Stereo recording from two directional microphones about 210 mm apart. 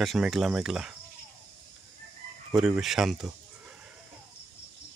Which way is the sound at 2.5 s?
Centre (ahead or behind).